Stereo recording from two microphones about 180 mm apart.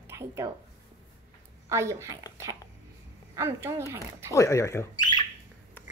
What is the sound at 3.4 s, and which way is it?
Speech, 15° right (ahead or behind).